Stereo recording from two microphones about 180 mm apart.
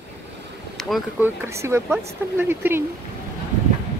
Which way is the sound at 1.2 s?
15° right (ahead or behind).